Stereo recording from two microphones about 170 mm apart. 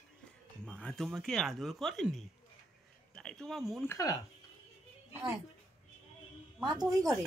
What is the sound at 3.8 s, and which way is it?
Speech, 20° left (ahead or behind).